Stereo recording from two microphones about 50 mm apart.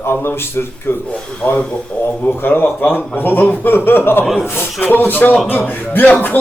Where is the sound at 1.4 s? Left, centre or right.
Left.